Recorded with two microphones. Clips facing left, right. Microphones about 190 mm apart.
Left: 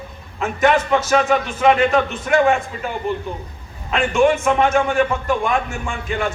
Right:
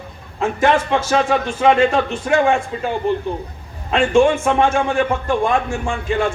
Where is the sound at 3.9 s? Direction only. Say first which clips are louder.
Right 2 dB; 30° right (ahead or behind).